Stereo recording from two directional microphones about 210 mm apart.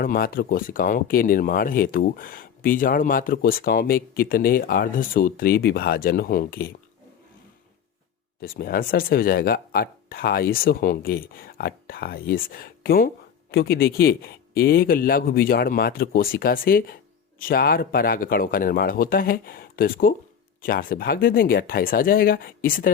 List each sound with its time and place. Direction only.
0.0 s speech: 45° left (ahead or behind)
8.4 s speech: 45° left (ahead or behind)